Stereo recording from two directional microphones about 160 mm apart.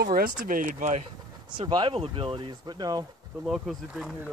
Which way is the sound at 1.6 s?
30° right (ahead or behind).